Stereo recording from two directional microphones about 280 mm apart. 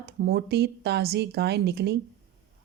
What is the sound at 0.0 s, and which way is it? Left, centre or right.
Speech, right.